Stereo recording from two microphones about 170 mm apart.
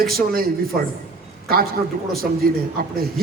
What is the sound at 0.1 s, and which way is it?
Speech, 60° right (ahead or behind).